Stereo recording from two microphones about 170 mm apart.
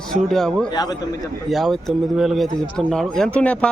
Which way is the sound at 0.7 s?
25° left (ahead or behind).